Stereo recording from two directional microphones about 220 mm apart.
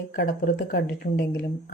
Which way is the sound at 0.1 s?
40° left (ahead or behind).